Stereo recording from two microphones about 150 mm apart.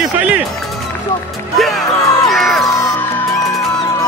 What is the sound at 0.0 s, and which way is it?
Music, 5° right (ahead or behind).